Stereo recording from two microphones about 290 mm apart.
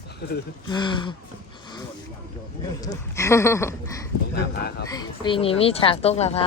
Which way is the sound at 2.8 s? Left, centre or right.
Centre.